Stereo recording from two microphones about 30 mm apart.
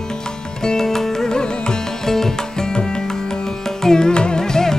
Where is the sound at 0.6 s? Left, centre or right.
Centre.